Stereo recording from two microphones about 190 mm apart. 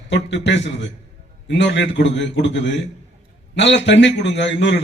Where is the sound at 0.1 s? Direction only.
65° left (ahead or behind).